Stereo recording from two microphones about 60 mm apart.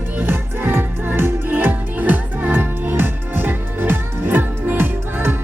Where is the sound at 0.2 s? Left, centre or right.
Right.